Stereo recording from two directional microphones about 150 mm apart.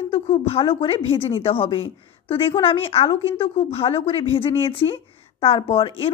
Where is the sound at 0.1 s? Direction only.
40° left (ahead or behind).